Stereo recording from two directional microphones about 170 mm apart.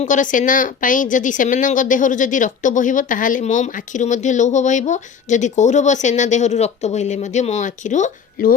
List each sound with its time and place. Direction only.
0.0 s a woman's voice: 50° left (ahead or behind)